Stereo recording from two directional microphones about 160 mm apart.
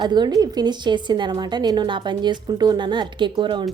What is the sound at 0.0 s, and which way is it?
A woman's voice, 25° right (ahead or behind).